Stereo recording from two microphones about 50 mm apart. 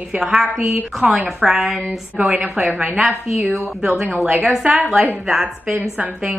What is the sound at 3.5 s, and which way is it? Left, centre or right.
Speech, centre.